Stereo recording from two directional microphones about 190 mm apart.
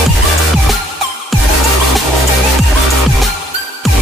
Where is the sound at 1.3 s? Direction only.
Centre (ahead or behind).